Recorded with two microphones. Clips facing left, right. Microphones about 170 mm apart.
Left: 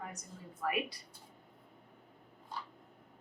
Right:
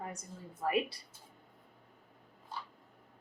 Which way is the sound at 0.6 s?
30° right (ahead or behind).